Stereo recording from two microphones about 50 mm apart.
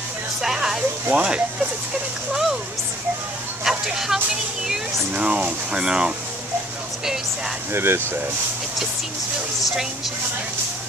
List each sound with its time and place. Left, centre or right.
0.4 s a sound: centre
1.1 s speech: right
3.6 s speech: centre
5.1 s speech: right
7.7 s speech: right